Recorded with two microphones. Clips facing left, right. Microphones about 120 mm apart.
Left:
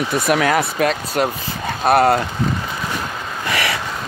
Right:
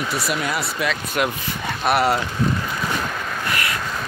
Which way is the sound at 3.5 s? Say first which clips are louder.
Left 6 dB; 90° left.